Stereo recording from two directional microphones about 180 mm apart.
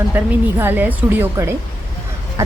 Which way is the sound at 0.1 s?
10° right (ahead or behind).